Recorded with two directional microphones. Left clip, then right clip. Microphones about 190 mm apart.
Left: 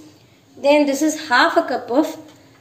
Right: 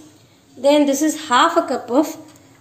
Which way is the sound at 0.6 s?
45° right (ahead or behind).